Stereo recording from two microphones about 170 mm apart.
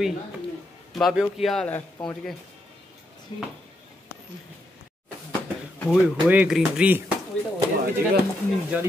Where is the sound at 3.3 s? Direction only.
35° left (ahead or behind).